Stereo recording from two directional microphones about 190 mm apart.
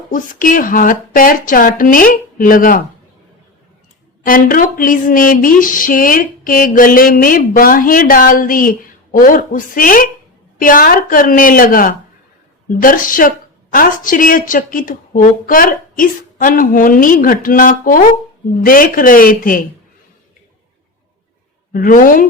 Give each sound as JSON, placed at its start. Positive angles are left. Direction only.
{"t": 0.1, "sound": "speech", "side_deg": 45}
{"t": 4.3, "sound": "speech", "side_deg": 45}
{"t": 21.7, "sound": "speech", "side_deg": 45}